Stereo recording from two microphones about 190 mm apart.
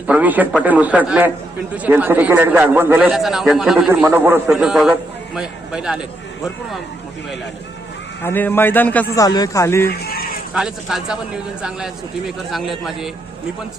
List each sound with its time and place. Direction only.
0.1 s a man's voice: 10° right (ahead or behind)
8.2 s a man's voice: 10° left (ahead or behind)
9.1 s a man's voice: 20° left (ahead or behind)
9.9 s fowl: 55° left (ahead or behind)
10.5 s a man's voice: centre (ahead or behind)
12.5 s a man's voice: centre (ahead or behind)